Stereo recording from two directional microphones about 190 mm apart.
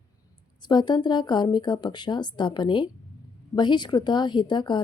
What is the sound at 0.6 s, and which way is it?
Speech, 20° left (ahead or behind).